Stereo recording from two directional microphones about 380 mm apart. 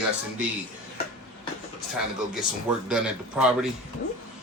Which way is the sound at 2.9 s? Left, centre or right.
Centre.